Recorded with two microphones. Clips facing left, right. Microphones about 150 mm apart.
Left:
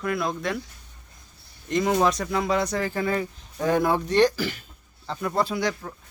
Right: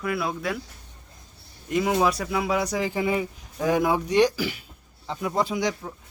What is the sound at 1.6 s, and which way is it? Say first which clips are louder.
Speech: left 1 dB; 5° right (ahead or behind).